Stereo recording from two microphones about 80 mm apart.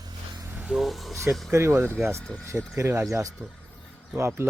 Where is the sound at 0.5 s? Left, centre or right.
Centre.